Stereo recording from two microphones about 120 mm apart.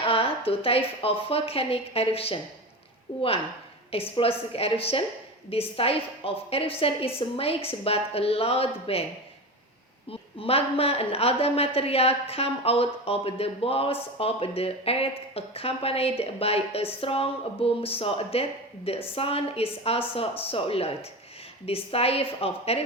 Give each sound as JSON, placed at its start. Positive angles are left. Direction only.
{"t": 0.0, "sound": "a woman's voice", "side_deg": 50}
{"t": 10.1, "sound": "a woman's voice", "side_deg": 55}